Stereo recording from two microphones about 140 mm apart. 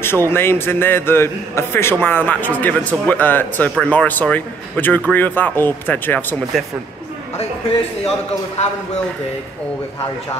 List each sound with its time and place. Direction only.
0.0 s a man's voice: 15° left (ahead or behind)
6.5 s speech: centre (ahead or behind)